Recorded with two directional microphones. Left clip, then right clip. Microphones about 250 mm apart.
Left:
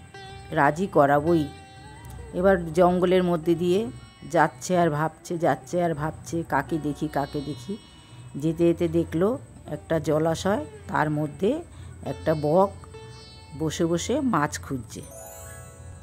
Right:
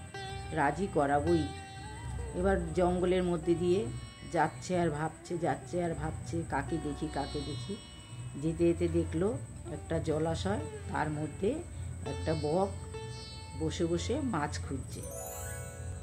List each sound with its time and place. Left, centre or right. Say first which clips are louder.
0.1 s music: even; centre
0.5 s speech: left 9 dB; left
1.2 s speech: left 7 dB; centre
2.3 s speech: left 10 dB; left
7.2 s speech: left 7 dB; centre
8.4 s speech: left 7 dB; left
12.0 s speech: left 6 dB; centre
13.6 s speech: left 8 dB; left